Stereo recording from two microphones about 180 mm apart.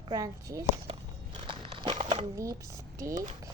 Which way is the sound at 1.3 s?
30° right (ahead or behind).